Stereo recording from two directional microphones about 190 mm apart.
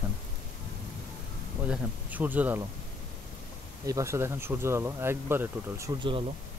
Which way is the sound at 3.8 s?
15° right (ahead or behind).